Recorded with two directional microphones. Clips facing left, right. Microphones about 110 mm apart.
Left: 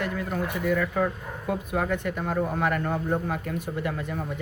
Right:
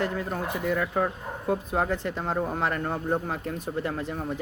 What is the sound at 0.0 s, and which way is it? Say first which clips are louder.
Speech: even; 30° right (ahead or behind).